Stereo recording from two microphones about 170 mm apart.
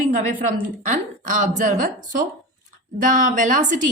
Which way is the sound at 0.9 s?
50° right (ahead or behind).